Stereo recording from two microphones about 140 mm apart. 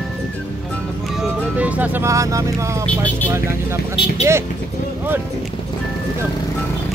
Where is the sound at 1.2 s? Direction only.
10° right (ahead or behind).